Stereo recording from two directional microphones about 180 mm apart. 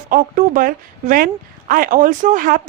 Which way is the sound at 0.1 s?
50° right (ahead or behind).